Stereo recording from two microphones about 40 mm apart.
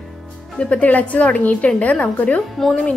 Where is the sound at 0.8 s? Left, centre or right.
Left.